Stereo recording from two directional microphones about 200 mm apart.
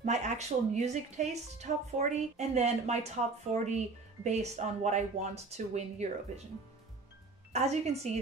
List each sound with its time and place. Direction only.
0.0 s a woman's voice: 35° right (ahead or behind)
7.5 s a woman's voice: 35° right (ahead or behind)